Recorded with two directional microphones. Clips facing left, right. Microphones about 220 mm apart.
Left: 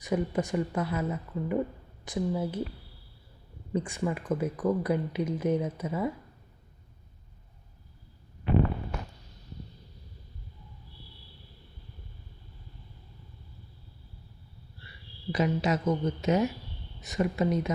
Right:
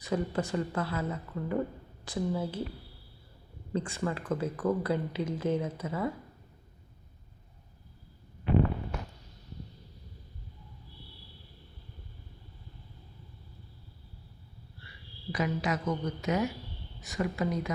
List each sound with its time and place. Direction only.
0.0 s speech: 15° left (ahead or behind)
3.7 s speech: 15° left (ahead or behind)
15.3 s a woman's voice: 25° left (ahead or behind)